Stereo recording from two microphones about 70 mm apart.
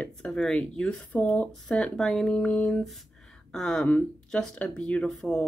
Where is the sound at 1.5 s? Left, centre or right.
Centre.